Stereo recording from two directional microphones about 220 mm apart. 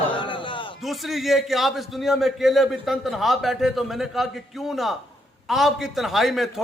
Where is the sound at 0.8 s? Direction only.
Centre (ahead or behind).